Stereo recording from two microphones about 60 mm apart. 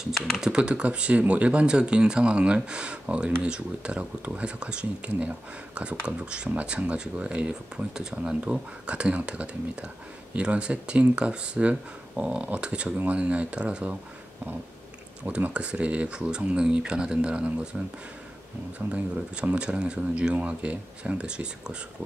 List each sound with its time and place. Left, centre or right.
0.4 s speech: centre
15.2 s speech: right